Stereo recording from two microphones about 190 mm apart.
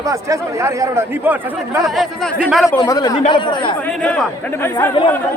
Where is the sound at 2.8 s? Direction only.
20° left (ahead or behind).